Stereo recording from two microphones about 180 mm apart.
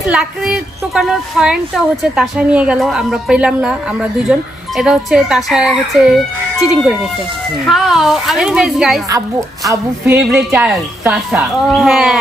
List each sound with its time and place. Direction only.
0.1 s a woman's voice: 5° right (ahead or behind)